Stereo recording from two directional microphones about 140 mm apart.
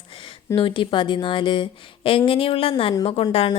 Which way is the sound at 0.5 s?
40° left (ahead or behind).